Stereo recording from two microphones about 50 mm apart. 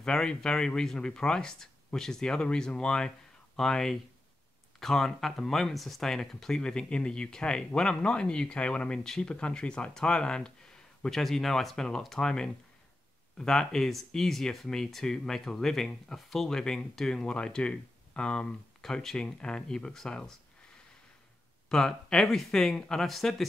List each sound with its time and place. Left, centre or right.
0.0 s speech: centre
11.1 s speech: centre
21.6 s speech: centre